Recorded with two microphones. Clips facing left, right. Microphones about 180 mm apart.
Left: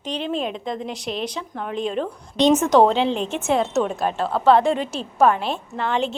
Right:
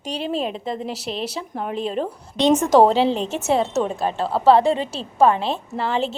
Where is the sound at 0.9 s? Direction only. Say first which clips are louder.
Even; 5° right (ahead or behind).